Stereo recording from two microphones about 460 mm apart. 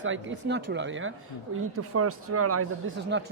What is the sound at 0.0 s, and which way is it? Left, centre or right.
Speech, right.